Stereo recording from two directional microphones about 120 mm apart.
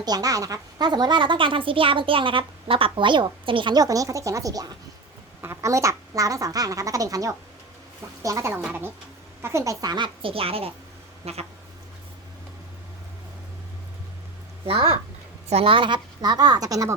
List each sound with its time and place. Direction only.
0.0 s speech: 30° right (ahead or behind); by 11.4 s 60° right (ahead or behind)
15.4 s speech: 55° right (ahead or behind); by 16.9 s 30° right (ahead or behind)